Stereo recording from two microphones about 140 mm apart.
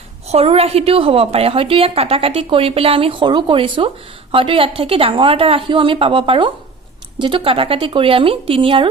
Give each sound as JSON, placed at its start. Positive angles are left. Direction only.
{"t": 0.3, "sound": "a woman's voice", "side_deg": -45}